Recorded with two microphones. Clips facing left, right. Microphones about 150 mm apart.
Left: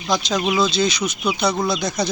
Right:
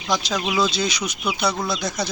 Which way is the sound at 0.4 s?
5° left (ahead or behind).